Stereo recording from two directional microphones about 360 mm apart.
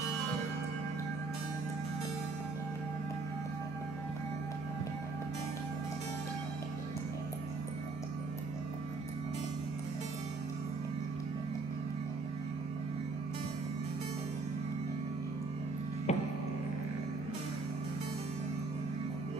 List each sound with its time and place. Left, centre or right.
16.1 s music: centre